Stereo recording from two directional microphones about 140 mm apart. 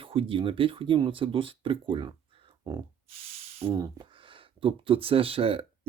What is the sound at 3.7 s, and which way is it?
Speech, 30° right (ahead or behind).